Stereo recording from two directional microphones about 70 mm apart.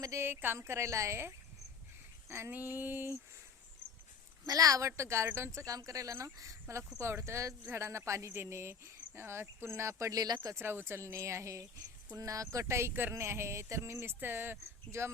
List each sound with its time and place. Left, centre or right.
0.0 s speech: right
0.3 s speech: right
2.5 s female singing: right
4.4 s speech: right
5.5 s speech: right
10.5 s speech: right